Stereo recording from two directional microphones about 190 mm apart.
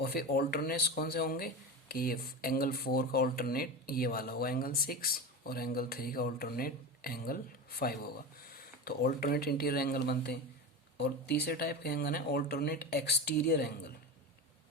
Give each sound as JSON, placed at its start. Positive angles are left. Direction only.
{"t": 0.0, "sound": "speech", "side_deg": 55}